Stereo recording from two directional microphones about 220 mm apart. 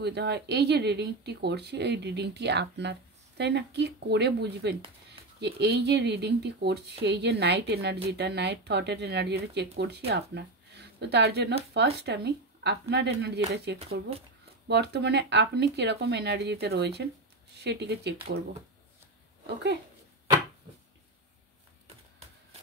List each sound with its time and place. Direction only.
0.0 s speech: 50° right (ahead or behind)
14.7 s speech: 50° right (ahead or behind)
19.4 s speech: 50° right (ahead or behind)